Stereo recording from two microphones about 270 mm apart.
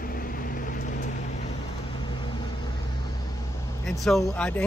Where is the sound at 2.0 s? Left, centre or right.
Centre.